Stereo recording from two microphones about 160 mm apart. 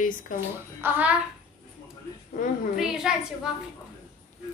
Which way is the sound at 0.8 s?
10° right (ahead or behind).